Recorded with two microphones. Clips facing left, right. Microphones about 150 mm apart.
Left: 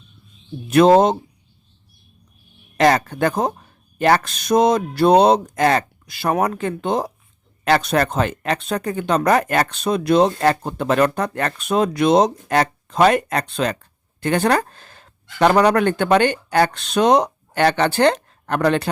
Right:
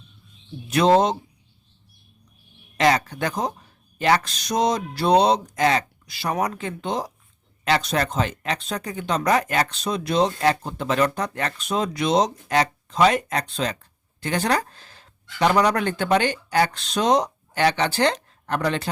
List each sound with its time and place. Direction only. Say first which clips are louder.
0.7 s speech: left 5 dB; 55° left (ahead or behind)
2.7 s speech: left 4 dB; 50° left (ahead or behind)